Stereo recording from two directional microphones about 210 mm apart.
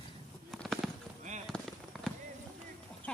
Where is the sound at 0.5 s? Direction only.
Centre (ahead or behind).